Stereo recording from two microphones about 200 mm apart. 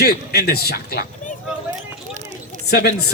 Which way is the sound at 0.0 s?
50° left (ahead or behind).